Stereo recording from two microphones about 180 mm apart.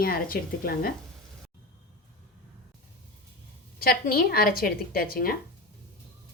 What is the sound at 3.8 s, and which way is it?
A woman's voice, 60° left (ahead or behind).